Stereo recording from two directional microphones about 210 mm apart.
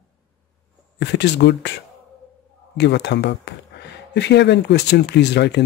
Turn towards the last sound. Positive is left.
turn(degrees=55)  # may be behind; listen again after turning